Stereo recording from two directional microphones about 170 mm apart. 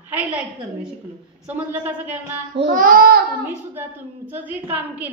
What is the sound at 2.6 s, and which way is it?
Speech, 50° right (ahead or behind).